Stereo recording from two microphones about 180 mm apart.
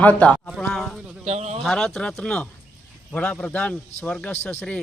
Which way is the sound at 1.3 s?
35° right (ahead or behind).